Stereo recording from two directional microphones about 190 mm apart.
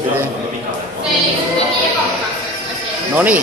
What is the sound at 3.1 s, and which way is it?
Speech, 10° right (ahead or behind).